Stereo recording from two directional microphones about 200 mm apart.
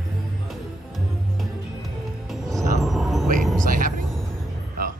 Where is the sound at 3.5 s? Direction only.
40° right (ahead or behind).